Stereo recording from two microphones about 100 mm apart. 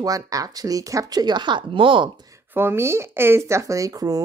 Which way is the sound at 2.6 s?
25° right (ahead or behind).